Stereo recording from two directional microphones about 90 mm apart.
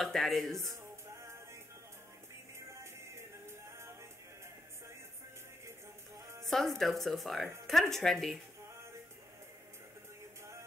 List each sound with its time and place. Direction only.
0.0 s speech: centre (ahead or behind)
2.7 s music: 30° right (ahead or behind)
6.4 s speech: 5° left (ahead or behind)